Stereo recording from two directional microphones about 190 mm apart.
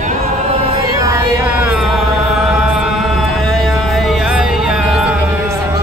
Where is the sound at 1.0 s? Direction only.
15° right (ahead or behind).